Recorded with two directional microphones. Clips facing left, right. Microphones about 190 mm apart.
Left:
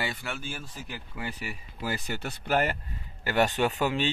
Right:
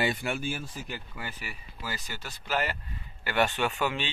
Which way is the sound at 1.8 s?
55° left (ahead or behind).